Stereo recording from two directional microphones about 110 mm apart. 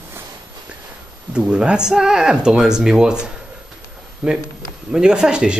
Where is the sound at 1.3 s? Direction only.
10° right (ahead or behind).